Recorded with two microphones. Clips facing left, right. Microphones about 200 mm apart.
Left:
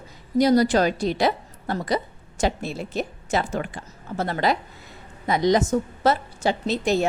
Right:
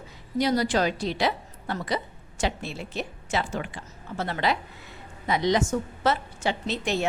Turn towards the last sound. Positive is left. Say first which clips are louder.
# left 5 dB
turn(degrees=40)  # may be behind; listen again after turning